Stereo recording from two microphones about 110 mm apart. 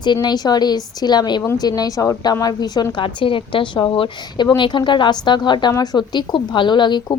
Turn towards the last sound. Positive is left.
turn(degrees=45)  # may be behind; listen again after turning